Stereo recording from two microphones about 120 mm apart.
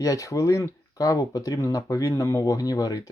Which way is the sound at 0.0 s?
30° left (ahead or behind).